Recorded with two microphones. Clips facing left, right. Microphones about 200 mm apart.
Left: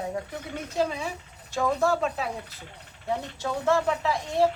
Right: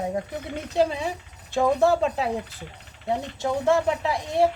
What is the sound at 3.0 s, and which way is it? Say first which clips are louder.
Speech: right 4 dB; 20° right (ahead or behind).